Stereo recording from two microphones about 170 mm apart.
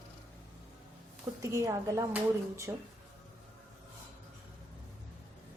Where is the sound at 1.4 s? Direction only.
15° right (ahead or behind).